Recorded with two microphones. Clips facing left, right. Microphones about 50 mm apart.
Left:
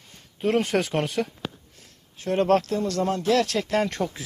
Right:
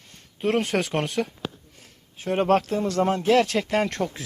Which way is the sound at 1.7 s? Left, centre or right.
Centre.